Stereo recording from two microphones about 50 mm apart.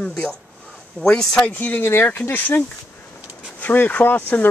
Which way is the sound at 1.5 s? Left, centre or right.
Left.